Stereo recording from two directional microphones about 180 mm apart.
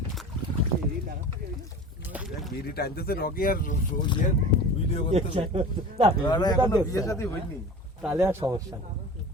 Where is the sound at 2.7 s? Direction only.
60° left (ahead or behind).